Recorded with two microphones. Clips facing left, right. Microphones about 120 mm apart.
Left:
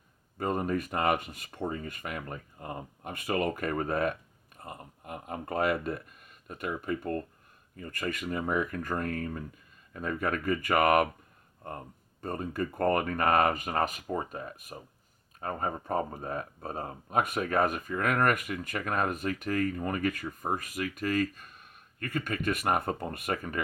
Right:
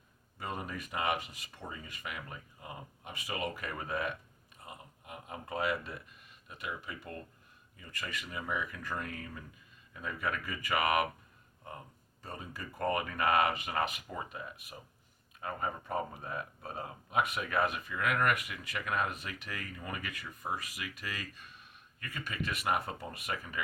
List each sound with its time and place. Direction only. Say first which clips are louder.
0.3 s speech: left 10 dB; 45° left (ahead or behind)